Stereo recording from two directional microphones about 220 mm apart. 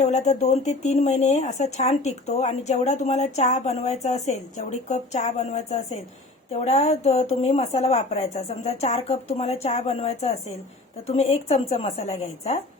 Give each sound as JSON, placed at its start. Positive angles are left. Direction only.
{"t": 0.0, "sound": "a woman's voice", "side_deg": 30}